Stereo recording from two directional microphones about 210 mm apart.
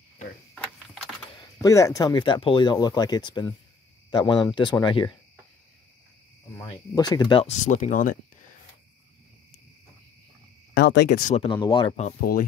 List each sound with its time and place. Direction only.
1.6 s speech: 15° left (ahead or behind)
6.6 s speech: 20° left (ahead or behind); by 8.2 s 40° left (ahead or behind)
10.7 s speech: 55° left (ahead or behind)
11.2 s speech: 30° left (ahead or behind)
12.2 s speech: 45° left (ahead or behind)